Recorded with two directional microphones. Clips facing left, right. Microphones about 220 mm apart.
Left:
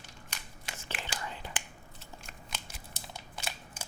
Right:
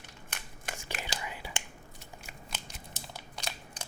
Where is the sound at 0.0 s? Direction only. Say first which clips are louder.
Right 2 dB; 55° right (ahead or behind).